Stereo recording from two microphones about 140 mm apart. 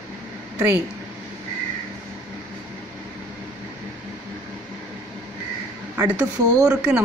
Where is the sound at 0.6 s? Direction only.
15° right (ahead or behind).